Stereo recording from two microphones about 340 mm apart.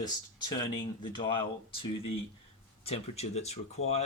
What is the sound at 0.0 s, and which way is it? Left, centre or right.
Speech, centre.